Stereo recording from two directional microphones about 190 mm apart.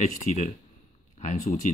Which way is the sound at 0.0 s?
40° left (ahead or behind).